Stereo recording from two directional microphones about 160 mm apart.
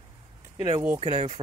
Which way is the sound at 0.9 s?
35° right (ahead or behind).